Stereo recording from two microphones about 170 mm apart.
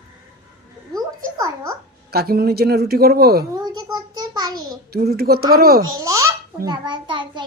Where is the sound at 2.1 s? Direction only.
65° right (ahead or behind).